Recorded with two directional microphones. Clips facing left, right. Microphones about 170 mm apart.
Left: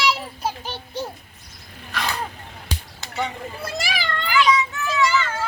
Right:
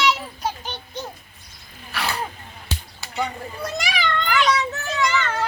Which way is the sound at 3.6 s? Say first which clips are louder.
Right 3 dB; 5° left (ahead or behind).